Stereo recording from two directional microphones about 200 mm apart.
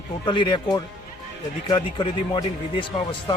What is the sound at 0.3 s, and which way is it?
Speech, 25° left (ahead or behind).